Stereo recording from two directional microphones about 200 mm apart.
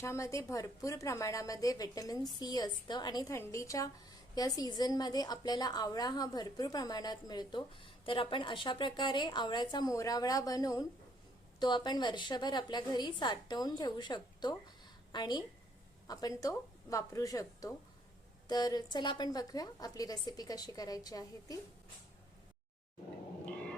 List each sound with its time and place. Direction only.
0.0 s a woman's voice: 15° left (ahead or behind)